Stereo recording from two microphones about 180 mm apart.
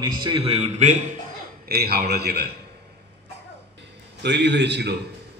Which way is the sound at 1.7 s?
60° right (ahead or behind).